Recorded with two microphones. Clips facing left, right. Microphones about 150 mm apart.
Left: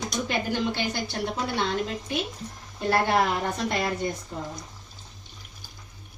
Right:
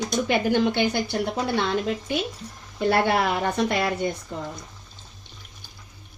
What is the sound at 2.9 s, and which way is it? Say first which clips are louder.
A woman's voice: right 1 dB; 70° right (ahead or behind).